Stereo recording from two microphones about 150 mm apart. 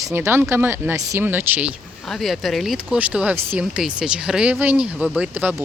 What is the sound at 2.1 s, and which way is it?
Speech, centre (ahead or behind).